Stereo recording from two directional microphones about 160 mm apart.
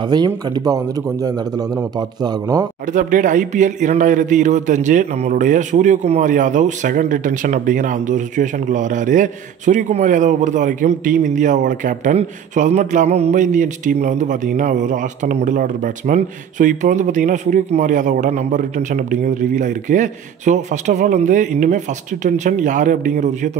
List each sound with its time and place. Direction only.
0.0 s a man's voice: 25° right (ahead or behind)
2.9 s a man's voice: 55° right (ahead or behind)